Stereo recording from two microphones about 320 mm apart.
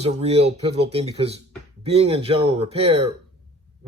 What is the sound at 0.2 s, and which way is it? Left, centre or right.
Speech, centre.